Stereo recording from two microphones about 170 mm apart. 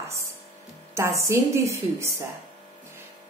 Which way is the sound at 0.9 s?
15° right (ahead or behind).